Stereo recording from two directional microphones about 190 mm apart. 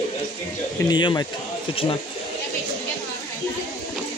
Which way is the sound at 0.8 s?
25° left (ahead or behind).